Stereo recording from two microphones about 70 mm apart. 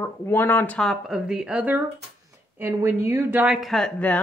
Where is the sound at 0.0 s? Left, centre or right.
Left.